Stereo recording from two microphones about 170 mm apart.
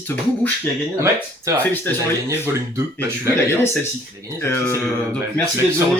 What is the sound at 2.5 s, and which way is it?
Speech, 15° right (ahead or behind).